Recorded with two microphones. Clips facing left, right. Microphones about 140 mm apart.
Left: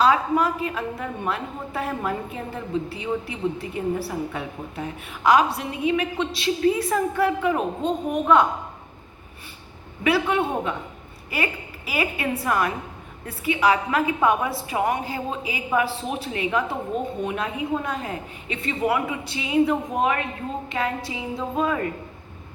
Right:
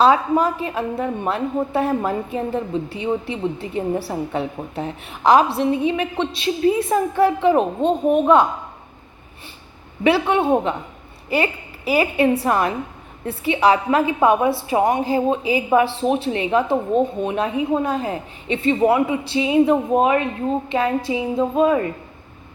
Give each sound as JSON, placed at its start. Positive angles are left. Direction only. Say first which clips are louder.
{"t": 0.0, "sound": "a woman's voice", "louder": "right 4 dB", "side_deg": -30}
{"t": 10.0, "sound": "a woman's voice", "louder": "right 4 dB", "side_deg": -25}